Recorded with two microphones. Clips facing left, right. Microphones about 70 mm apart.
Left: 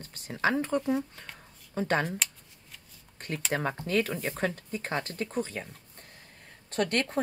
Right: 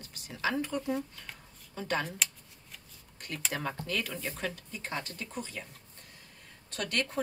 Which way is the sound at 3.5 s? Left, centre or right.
Left.